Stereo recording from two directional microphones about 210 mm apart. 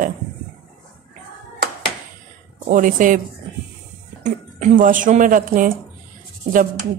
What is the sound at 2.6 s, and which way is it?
Speech, 40° right (ahead or behind).